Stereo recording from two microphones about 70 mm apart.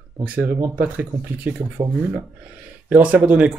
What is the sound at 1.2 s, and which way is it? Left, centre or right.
Speech, right.